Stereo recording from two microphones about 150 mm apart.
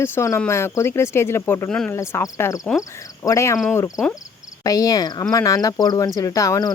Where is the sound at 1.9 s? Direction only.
20° left (ahead or behind).